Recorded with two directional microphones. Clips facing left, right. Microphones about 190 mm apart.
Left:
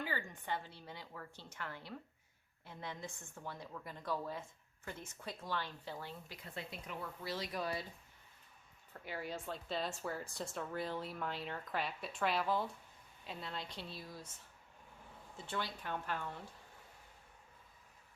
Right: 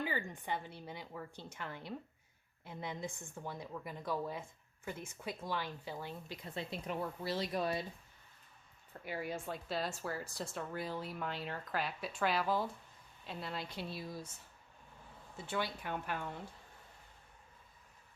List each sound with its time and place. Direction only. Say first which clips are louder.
0.0 s a woman's voice: right 3 dB; 15° right (ahead or behind)
9.0 s a woman's voice: right 3 dB; 10° right (ahead or behind)
15.4 s a woman's voice: right 4 dB; 10° right (ahead or behind)